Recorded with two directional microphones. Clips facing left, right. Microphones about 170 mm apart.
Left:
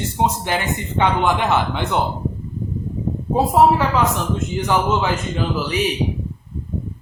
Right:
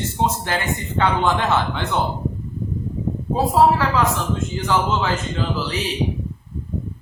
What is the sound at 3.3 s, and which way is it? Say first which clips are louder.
A man's voice: left 2 dB; 20° left (ahead or behind).